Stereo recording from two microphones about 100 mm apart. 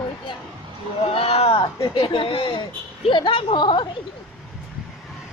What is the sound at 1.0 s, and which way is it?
Speech, 75° left (ahead or behind).